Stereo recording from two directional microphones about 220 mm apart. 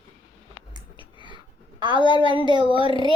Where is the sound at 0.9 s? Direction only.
20° right (ahead or behind).